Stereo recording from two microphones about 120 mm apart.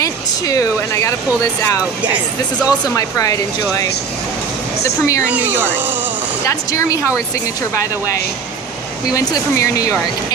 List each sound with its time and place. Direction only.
0.0 s speech: 30° left (ahead or behind)
2.6 s speech: 30° left (ahead or behind)
5.3 s speech: 15° right (ahead or behind)
6.5 s speech: 25° left (ahead or behind)
9.1 s speech: 30° left (ahead or behind)